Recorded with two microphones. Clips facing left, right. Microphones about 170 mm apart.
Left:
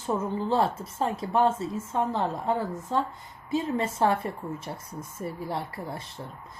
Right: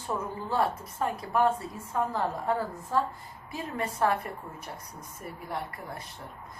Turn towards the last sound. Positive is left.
turn(degrees=30)  # may be behind; listen again after turning